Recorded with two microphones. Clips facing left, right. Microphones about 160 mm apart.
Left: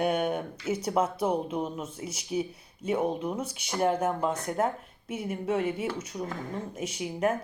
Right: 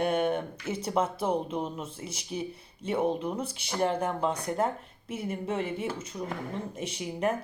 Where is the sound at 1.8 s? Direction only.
30° right (ahead or behind).